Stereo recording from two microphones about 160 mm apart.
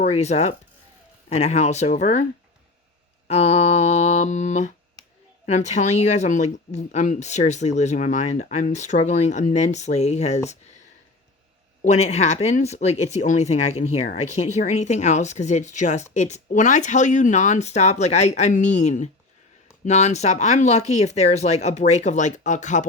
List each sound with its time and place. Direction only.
0.0 s speech: 45° left (ahead or behind)
3.2 s speech: 40° left (ahead or behind)
11.8 s speech: 45° left (ahead or behind)